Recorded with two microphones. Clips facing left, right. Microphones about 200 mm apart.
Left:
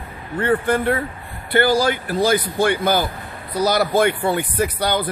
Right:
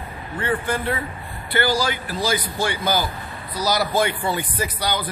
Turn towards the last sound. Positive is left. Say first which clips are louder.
# left 5 dB
turn(degrees=55)  # may be behind; listen again after turning